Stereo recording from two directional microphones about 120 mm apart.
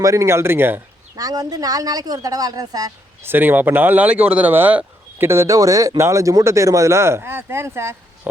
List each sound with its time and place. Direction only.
0.0 s speech: 25° right (ahead or behind)
1.1 s speech: 30° right (ahead or behind)
3.2 s speech: 15° right (ahead or behind)